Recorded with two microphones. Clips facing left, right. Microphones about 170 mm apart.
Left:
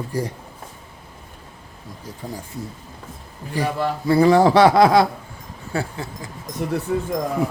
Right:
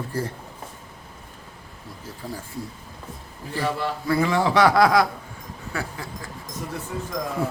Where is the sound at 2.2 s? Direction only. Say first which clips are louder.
Left 2 dB; 20° left (ahead or behind).